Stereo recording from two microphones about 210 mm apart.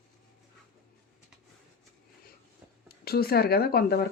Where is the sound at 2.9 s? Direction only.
45° left (ahead or behind).